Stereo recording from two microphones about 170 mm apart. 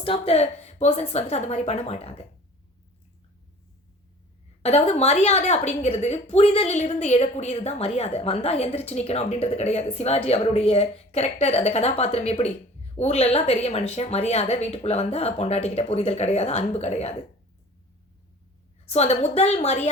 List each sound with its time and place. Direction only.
0.0 s a woman's voice: 35° left (ahead or behind)
4.6 s a woman's voice: 40° left (ahead or behind)
18.9 s a woman's voice: 40° left (ahead or behind)